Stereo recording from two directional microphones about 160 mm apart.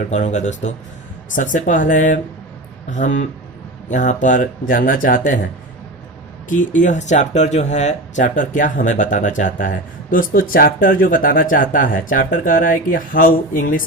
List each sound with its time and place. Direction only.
0.1 s speech: 50° left (ahead or behind)
6.5 s speech: 55° left (ahead or behind)